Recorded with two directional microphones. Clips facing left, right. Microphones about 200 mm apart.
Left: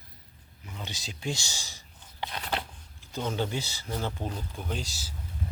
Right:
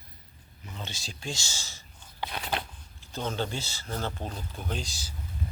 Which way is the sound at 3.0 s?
10° left (ahead or behind).